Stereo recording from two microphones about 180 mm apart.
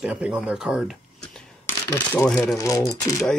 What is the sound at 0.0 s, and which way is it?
Speech, 5° right (ahead or behind).